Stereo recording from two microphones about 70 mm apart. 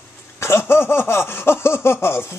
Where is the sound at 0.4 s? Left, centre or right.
Left.